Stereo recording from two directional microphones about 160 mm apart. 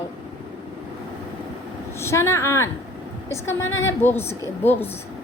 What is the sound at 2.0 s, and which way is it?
A woman's voice, 15° left (ahead or behind).